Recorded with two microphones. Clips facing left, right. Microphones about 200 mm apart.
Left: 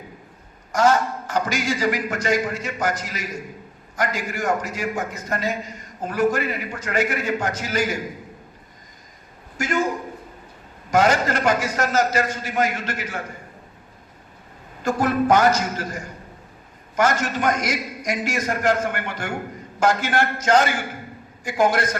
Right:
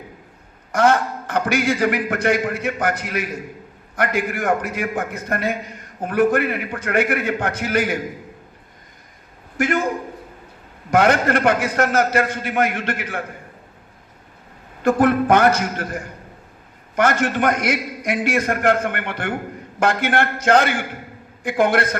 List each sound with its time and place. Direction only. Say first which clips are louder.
0.7 s a man's voice: right 1 dB; 60° right (ahead or behind)
9.6 s a man's voice: right 3 dB; 60° right (ahead or behind)
10.9 s a man's voice: right 3 dB; 60° right (ahead or behind)
14.8 s a man's voice: right 5 dB; 55° right (ahead or behind)